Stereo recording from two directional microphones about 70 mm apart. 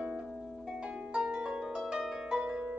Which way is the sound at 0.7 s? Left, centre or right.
Centre.